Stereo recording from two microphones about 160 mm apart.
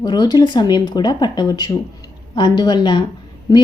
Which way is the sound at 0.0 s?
25° left (ahead or behind).